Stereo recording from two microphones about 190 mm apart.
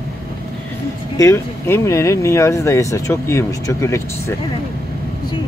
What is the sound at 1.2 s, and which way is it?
Speech, 15° left (ahead or behind).